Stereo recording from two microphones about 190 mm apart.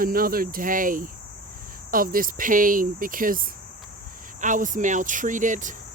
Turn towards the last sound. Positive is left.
turn(degrees=-40)  # may be behind; listen again after turning